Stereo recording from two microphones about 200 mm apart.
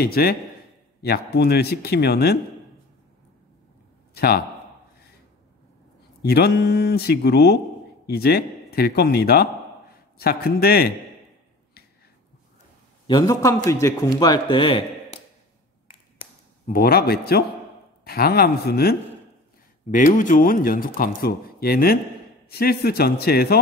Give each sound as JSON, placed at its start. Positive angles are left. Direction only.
{"t": 0.0, "sound": "speech", "side_deg": 50}
{"t": 4.1, "sound": "a man's voice", "side_deg": 50}
{"t": 6.2, "sound": "speech", "side_deg": 50}
{"t": 13.0, "sound": "a man's voice", "side_deg": 20}
{"t": 16.7, "sound": "speech", "side_deg": 50}
{"t": 19.9, "sound": "speech", "side_deg": 40}